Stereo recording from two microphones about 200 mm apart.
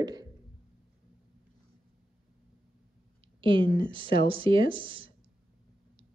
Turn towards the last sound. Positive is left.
turn(degrees=-25)  # may be behind; listen again after turning